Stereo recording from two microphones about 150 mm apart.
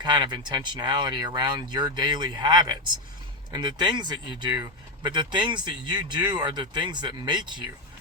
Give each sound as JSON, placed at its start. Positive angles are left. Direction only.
{"t": 0.0, "sound": "speech", "side_deg": -30}